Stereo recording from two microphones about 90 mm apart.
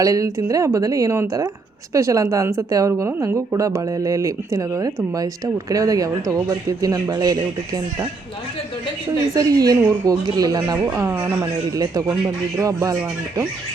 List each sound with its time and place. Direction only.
0.0 s speech: 40° right (ahead or behind)
9.3 s speech: 45° right (ahead or behind)
10.9 s speech: 30° right (ahead or behind)
11.8 s speech: 45° right (ahead or behind)